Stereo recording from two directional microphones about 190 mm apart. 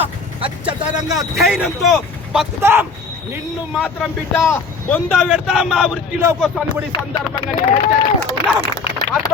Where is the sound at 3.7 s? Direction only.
5° left (ahead or behind).